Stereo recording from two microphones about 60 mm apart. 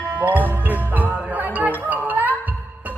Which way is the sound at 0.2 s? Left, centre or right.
Right.